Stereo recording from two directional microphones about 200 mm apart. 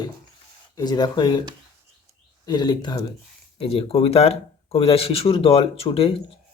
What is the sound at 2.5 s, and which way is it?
Speech, 20° left (ahead or behind).